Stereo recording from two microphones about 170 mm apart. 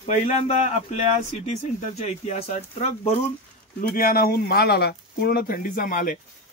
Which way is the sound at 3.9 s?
60° left (ahead or behind).